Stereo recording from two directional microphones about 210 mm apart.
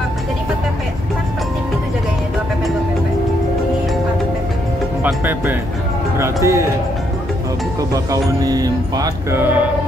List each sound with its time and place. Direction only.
5.0 s music: 10° right (ahead or behind)
7.9 s music: 15° right (ahead or behind)